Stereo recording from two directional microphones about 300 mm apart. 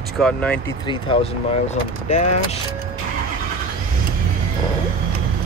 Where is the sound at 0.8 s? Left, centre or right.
Centre.